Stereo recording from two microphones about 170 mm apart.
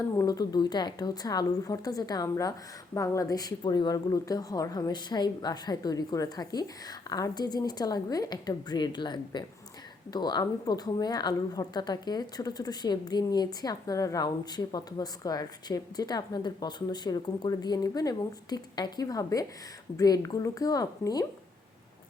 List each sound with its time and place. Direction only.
0.2 s speech: 20° left (ahead or behind)